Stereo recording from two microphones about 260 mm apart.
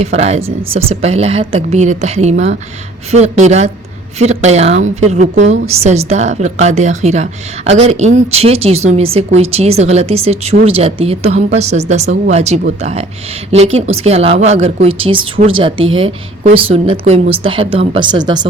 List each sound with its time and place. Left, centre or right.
0.0 s a woman's voice: right